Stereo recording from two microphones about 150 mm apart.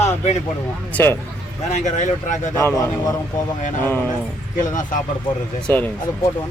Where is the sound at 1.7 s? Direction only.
55° left (ahead or behind).